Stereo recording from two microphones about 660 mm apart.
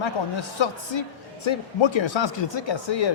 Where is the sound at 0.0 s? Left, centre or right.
Left.